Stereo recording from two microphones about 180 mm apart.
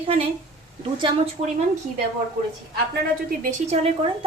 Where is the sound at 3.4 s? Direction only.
40° right (ahead or behind).